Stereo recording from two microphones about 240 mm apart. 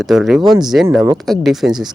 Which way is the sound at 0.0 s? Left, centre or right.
Centre.